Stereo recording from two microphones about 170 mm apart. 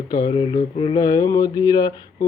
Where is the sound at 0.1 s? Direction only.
25° left (ahead or behind).